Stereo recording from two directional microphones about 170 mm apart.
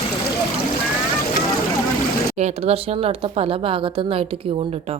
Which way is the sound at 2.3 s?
40° right (ahead or behind).